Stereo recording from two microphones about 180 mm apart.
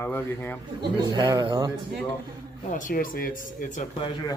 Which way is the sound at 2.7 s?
45° left (ahead or behind).